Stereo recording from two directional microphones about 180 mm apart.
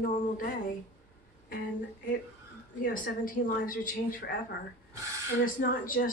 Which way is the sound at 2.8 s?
50° left (ahead or behind).